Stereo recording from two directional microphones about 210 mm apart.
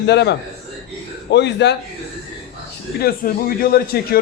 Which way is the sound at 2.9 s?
45° left (ahead or behind).